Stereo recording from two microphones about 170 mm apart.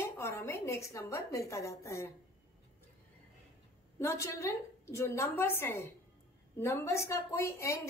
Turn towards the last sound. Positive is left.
turn(degrees=15)  # may be behind; listen again after turning